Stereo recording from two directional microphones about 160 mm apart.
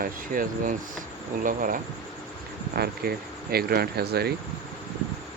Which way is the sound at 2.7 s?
75° right (ahead or behind).